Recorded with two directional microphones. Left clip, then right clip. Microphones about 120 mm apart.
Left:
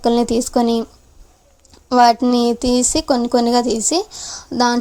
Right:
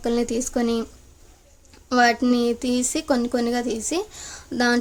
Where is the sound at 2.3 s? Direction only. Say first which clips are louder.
Left 6 dB; 35° left (ahead or behind).